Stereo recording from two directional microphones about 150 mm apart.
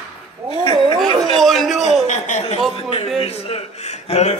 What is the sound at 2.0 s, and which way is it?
Chuckle, 55° left (ahead or behind).